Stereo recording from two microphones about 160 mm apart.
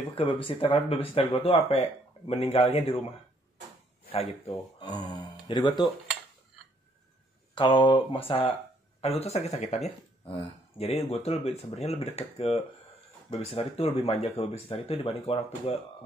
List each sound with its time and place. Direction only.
0.1 s speech: 30° left (ahead or behind)
4.1 s speech: 40° left (ahead or behind)
4.8 s a sound: 25° left (ahead or behind)
5.6 s speech: 35° left (ahead or behind)
7.5 s speech: 30° left (ahead or behind)